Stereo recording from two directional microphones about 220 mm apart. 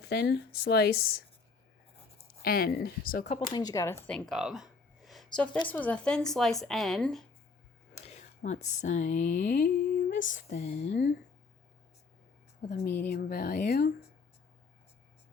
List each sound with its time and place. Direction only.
0.0 s speech: 45° left (ahead or behind)
2.4 s speech: 45° left (ahead or behind)
3.5 s speech: 15° left (ahead or behind); by 7.3 s centre (ahead or behind)
8.0 s speech: 30° left (ahead or behind)
12.6 s speech: 50° left (ahead or behind)